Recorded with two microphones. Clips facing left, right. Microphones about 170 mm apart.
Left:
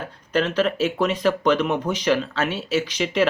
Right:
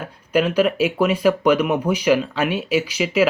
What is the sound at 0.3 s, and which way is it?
Speech, 10° right (ahead or behind).